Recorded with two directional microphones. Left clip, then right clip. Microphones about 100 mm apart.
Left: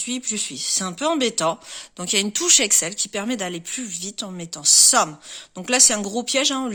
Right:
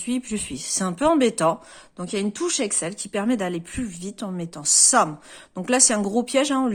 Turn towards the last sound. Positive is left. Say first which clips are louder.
# even
turn(degrees=0)  # may be behind; listen again after turning